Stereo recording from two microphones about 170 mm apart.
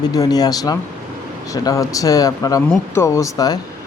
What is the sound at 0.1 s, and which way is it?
A man's voice, 20° left (ahead or behind).